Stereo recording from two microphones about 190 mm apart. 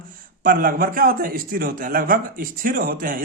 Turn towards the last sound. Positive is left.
turn(degrees=-45)  # may be behind; listen again after turning